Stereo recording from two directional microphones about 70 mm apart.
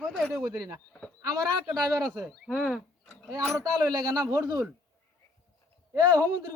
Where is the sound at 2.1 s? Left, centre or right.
Centre.